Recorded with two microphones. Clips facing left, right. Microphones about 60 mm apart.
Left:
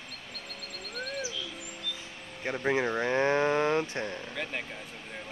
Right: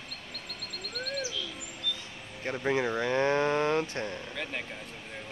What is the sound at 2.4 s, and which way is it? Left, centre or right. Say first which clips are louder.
Speech: left 1 dB; centre.